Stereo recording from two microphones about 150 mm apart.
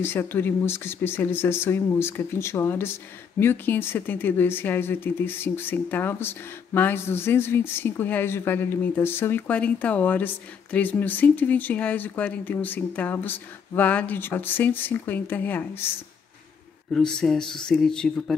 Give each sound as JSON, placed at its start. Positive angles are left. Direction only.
{"t": 0.0, "sound": "speech", "side_deg": 15}
{"t": 16.9, "sound": "speech", "side_deg": 5}